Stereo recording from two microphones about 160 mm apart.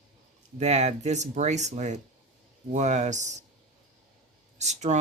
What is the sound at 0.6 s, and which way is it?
Speech, 45° right (ahead or behind).